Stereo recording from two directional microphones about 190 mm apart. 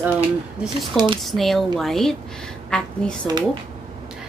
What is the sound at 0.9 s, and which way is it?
Speech, 25° right (ahead or behind).